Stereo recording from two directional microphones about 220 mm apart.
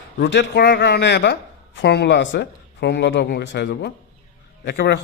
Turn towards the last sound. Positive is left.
turn(degrees=50)  # may be behind; listen again after turning